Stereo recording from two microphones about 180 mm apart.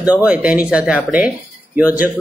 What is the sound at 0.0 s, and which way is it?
Speech, 5° right (ahead or behind).